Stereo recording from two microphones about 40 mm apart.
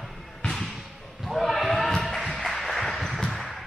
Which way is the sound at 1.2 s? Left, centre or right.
Centre.